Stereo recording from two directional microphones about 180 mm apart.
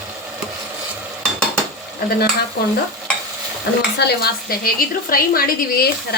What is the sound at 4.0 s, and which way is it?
A woman's voice, 60° left (ahead or behind).